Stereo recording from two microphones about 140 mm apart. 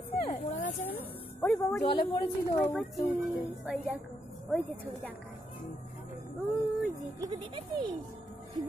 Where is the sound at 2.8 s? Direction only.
Centre (ahead or behind).